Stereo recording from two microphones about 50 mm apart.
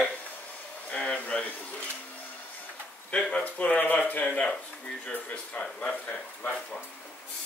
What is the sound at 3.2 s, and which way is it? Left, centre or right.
Speech, left.